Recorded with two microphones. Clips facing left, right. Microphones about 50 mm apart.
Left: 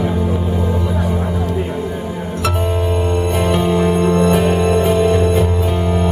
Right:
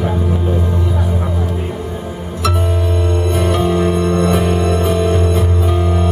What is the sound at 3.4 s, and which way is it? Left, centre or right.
Music, left.